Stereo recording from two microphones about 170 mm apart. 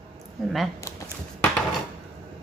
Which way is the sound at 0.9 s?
20° left (ahead or behind).